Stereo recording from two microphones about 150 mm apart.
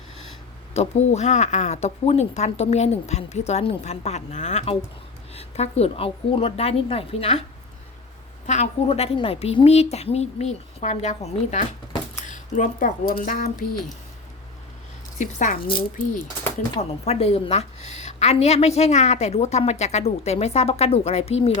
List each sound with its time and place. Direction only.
0.7 s a woman's voice: 45° left (ahead or behind)
8.4 s a woman's voice: 50° left (ahead or behind); by 13.7 s 65° left (ahead or behind)
15.2 s speech: 60° left (ahead or behind)
17.1 s a woman's voice: 45° left (ahead or behind)